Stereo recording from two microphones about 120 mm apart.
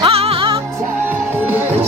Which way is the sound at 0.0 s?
55° right (ahead or behind).